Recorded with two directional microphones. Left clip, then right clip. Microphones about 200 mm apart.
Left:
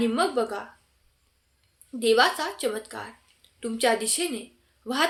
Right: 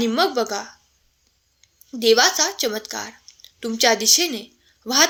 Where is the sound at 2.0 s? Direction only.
40° right (ahead or behind).